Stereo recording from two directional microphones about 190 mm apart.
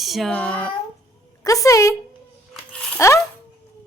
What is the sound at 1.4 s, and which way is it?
Speech, 15° left (ahead or behind).